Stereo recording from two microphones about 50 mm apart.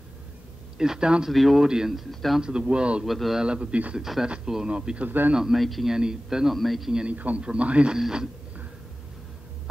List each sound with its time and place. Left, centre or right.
0.7 s a man's voice: centre
1.3 s a man's voice: centre
2.0 s a man's voice: centre
2.4 s a man's voice: centre
3.1 s a man's voice: centre
3.4 s a man's voice: right
3.9 s a man's voice: centre
4.6 s a man's voice: right
5.0 s a man's voice: right
5.3 s a man's voice: centre
5.9 s a man's voice: centre
6.5 s a man's voice: centre
7.1 s a man's voice: right